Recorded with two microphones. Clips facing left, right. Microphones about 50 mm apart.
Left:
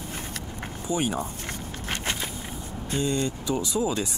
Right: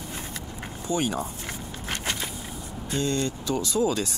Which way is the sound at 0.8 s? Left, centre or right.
Centre.